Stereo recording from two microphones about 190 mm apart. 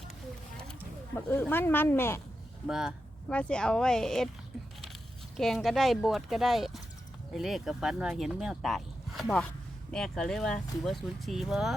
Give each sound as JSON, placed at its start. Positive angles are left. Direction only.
{"t": 0.5, "sound": "speech", "side_deg": 5}
{"t": 2.6, "sound": "speech", "side_deg": -5}
{"t": 5.4, "sound": "speech", "side_deg": 0}